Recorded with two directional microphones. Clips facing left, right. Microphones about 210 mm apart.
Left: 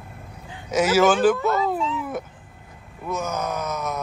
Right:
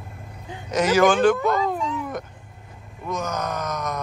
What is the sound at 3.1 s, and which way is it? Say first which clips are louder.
Groan: left 1 dB; 10° left (ahead or behind).